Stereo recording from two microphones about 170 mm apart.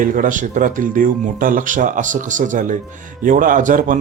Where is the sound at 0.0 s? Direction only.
50° right (ahead or behind).